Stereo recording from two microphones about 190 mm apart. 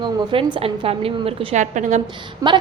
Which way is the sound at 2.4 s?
20° right (ahead or behind).